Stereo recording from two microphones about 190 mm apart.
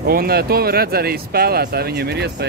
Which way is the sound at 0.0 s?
55° right (ahead or behind).